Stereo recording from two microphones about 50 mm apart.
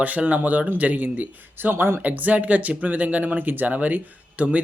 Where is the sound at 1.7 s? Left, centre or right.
Right.